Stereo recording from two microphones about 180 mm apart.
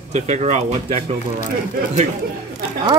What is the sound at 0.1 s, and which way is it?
Speech, 40° right (ahead or behind).